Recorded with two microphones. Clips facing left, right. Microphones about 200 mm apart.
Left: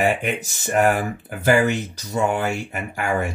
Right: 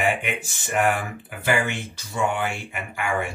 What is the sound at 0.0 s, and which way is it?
Speech, 40° left (ahead or behind).